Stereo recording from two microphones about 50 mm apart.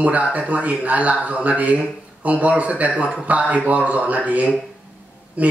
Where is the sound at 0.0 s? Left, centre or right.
Right.